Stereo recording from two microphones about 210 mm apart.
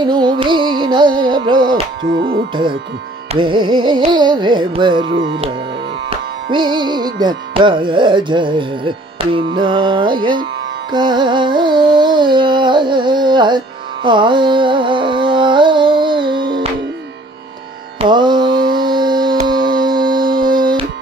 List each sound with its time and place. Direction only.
0.0 s music: 20° right (ahead or behind)
10.9 s carnatic music: 20° right (ahead or behind)
14.0 s music: 20° right (ahead or behind)
18.0 s carnatic music: 20° right (ahead or behind)
19.4 s a sound: 20° right (ahead or behind)